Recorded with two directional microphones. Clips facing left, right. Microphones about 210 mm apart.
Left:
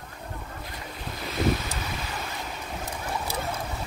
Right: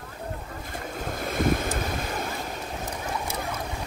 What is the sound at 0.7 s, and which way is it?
Boat, 50° right (ahead or behind).